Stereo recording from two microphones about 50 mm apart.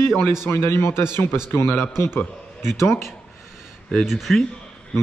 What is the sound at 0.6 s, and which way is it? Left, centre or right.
A man's voice, left.